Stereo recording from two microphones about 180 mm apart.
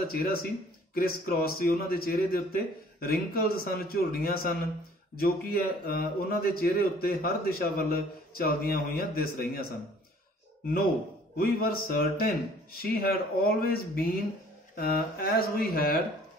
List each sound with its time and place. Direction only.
0.1 s a man's voice: 55° left (ahead or behind)
11.3 s a man's voice: 55° left (ahead or behind)